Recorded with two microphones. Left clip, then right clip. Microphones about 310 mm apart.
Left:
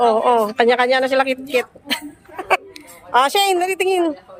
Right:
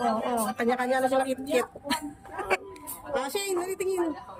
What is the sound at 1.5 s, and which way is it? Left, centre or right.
Speech, centre.